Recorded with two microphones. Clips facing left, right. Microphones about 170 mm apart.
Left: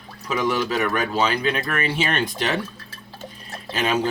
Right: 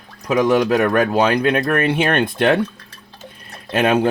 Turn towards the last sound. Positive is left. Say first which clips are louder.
# right 6 dB
turn(degrees=-60)  # may be behind; listen again after turning